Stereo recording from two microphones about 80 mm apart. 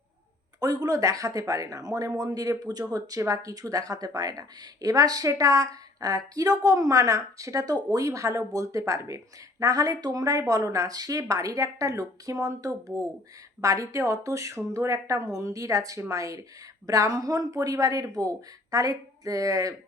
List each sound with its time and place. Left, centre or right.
0.6 s speech: right